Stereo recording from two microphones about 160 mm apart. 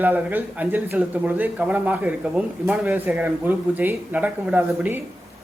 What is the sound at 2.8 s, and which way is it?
A man's voice, 15° right (ahead or behind).